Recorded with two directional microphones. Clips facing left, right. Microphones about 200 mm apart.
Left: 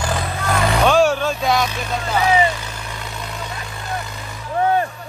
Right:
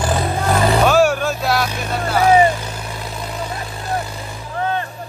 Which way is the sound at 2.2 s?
45° right (ahead or behind).